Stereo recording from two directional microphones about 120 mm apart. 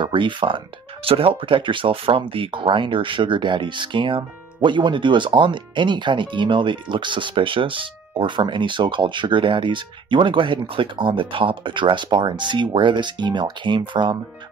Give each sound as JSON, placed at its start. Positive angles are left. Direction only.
{"t": 0.0, "sound": "speech", "side_deg": -45}